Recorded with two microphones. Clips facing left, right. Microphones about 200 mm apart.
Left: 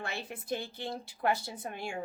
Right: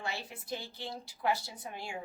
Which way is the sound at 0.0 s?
55° left (ahead or behind).